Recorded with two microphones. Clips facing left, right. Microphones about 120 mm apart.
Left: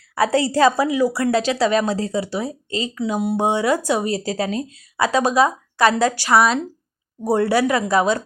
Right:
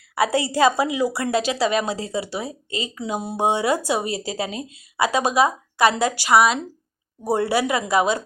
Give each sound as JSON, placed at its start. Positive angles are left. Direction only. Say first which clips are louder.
{"t": 0.2, "sound": "a woman's voice", "louder": "left 2 dB", "side_deg": -15}